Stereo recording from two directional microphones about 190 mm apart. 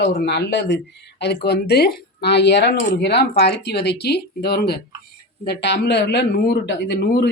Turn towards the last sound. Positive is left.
turn(degrees=60)  # may be behind; listen again after turning